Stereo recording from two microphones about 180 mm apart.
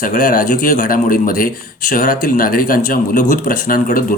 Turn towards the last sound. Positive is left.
turn(degrees=50)  # may be behind; listen again after turning